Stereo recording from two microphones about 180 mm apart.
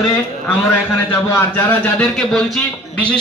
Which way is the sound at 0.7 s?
10° left (ahead or behind).